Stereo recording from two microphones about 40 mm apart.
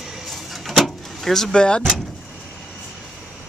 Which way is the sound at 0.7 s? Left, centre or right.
Centre.